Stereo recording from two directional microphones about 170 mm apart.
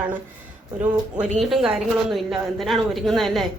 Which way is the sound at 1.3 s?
Centre (ahead or behind).